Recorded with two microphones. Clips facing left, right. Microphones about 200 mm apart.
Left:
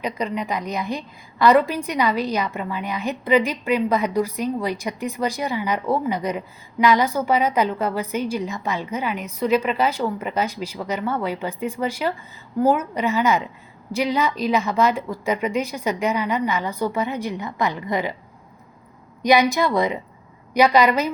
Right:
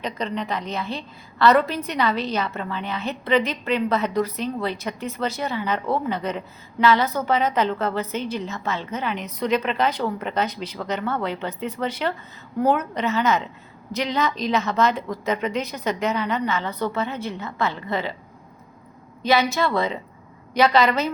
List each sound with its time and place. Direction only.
0.0 s a woman's voice: 10° left (ahead or behind)
19.2 s a woman's voice: 15° left (ahead or behind)